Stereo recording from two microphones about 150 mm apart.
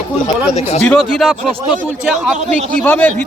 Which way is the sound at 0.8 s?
5° left (ahead or behind).